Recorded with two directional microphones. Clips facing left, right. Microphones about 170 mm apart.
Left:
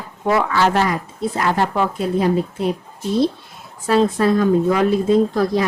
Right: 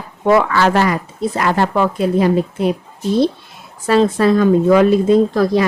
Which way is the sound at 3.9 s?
90° right.